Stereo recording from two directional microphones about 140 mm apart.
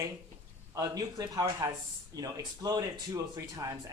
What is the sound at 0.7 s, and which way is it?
Speech, 25° right (ahead or behind).